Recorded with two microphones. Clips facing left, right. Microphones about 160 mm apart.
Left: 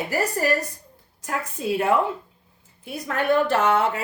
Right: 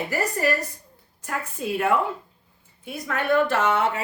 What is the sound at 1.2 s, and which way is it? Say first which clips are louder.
Speech: left 2 dB; 40° left (ahead or behind).